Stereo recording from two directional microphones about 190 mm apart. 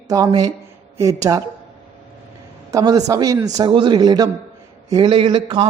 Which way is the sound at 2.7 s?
20° right (ahead or behind).